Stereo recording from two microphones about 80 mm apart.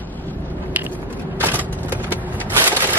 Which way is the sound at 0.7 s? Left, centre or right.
Right.